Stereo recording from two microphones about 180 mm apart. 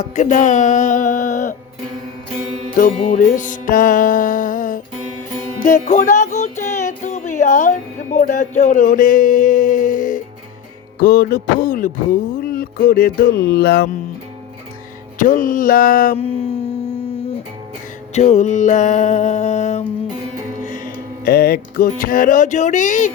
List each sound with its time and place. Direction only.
0.0 s speech: 45° left (ahead or behind)
2.7 s music: 45° left (ahead or behind)
11.0 s speech: 55° left (ahead or behind)
12.4 s music: 55° left (ahead or behind)
15.2 s speech: 45° left (ahead or behind)
16.1 s a sound: 35° left (ahead or behind)
18.1 s a sound: 40° left (ahead or behind)
20.6 s music: 45° left (ahead or behind)